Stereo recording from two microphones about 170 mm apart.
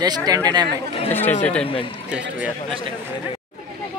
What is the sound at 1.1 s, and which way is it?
Speech, 10° left (ahead or behind).